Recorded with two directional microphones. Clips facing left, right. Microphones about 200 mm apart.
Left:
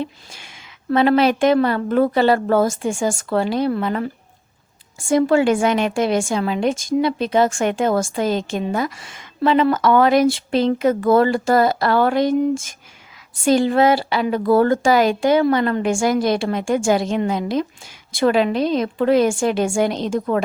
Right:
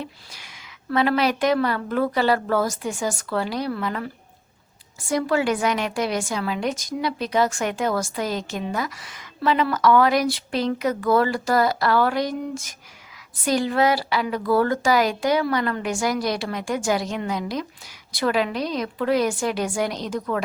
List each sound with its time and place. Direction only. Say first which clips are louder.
0.0 s a woman's voice: left 7 dB; 25° left (ahead or behind)